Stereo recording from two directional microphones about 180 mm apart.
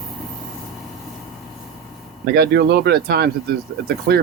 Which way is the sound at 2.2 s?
65° right (ahead or behind).